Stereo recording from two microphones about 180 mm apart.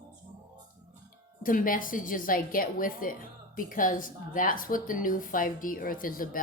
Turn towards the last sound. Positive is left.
turn(degrees=50)  # may be behind; listen again after turning